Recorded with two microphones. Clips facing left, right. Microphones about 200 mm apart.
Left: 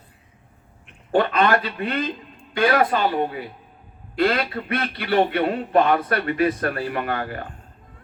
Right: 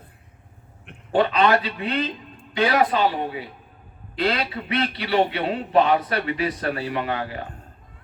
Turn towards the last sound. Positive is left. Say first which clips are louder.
# even
turn(degrees=50)  # may be behind; listen again after turning